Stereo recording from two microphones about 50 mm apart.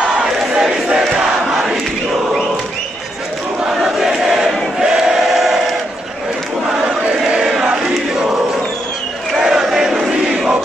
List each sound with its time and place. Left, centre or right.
0.2 s battle cry: centre
1.5 s crowd: centre
3.8 s a sound: centre
6.7 s choir: centre
7.3 s crowd: centre
9.3 s battle cry: centre